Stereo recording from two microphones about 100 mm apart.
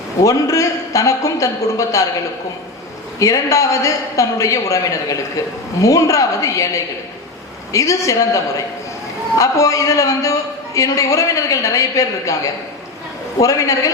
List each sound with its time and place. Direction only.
0.2 s a man's voice: 35° left (ahead or behind)
3.2 s a man's voice: 35° left (ahead or behind)
7.7 s a man's voice: 30° left (ahead or behind)